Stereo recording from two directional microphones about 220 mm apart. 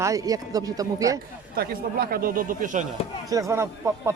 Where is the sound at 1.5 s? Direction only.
45° right (ahead or behind).